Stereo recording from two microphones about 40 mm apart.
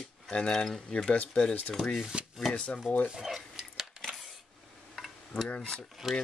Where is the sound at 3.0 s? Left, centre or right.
Centre.